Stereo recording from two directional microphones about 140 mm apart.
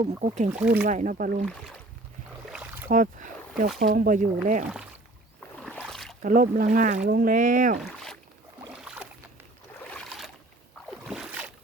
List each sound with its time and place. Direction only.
0.0 s speech: 60° right (ahead or behind)
0.5 s speech: 5° right (ahead or behind)
0.9 s speech: 60° right (ahead or behind); by 1.5 s 85° right
2.5 s boat: 10° right (ahead or behind)
2.9 s speech: 70° right (ahead or behind)
3.8 s speech: 80° right
5.6 s boat: 5° left (ahead or behind)
6.2 s speech: 80° right
7.8 s boat: 5° left (ahead or behind)
8.7 s boat: 5° right (ahead or behind)
10.1 s boat: centre (ahead or behind)
11.0 s a sound: 5° right (ahead or behind)